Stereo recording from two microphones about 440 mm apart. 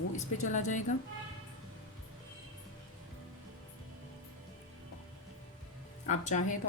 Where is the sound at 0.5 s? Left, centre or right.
Centre.